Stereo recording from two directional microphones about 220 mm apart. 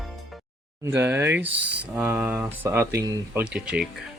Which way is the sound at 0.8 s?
10° right (ahead or behind).